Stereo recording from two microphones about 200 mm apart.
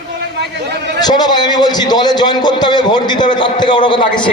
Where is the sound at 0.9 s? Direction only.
20° left (ahead or behind).